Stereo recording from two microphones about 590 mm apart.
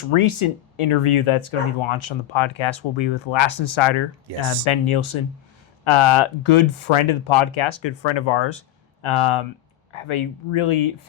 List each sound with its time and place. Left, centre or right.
0.1 s speech: left